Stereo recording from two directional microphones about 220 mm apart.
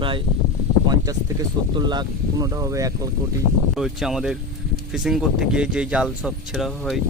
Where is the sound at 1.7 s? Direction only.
20° right (ahead or behind).